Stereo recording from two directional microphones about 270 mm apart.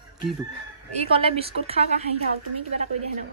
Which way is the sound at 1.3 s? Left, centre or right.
Right.